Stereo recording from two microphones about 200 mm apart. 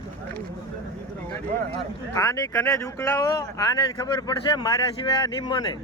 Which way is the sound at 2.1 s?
15° left (ahead or behind).